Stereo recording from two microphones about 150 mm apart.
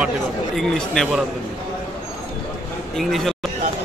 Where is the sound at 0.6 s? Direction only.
5° left (ahead or behind).